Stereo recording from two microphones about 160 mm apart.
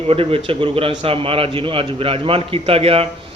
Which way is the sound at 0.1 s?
35° right (ahead or behind).